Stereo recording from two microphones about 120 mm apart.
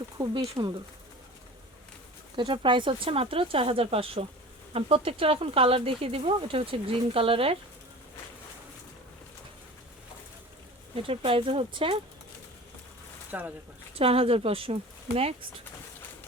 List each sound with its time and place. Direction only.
0.2 s speech: 40° right (ahead or behind)
2.3 s speech: 40° right (ahead or behind)
11.0 s speech: 50° right (ahead or behind)
13.3 s speech: 15° right (ahead or behind)
13.9 s speech: 55° right (ahead or behind)